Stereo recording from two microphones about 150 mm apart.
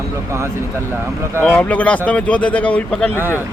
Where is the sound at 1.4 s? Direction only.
10° left (ahead or behind).